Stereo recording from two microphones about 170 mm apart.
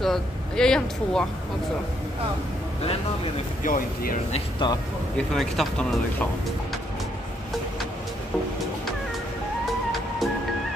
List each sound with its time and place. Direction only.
0.0 s speech: 5° left (ahead or behind)
3.6 s speech: 55° left (ahead or behind)
4.3 s speech: 30° left (ahead or behind)
5.1 s speech: centre (ahead or behind)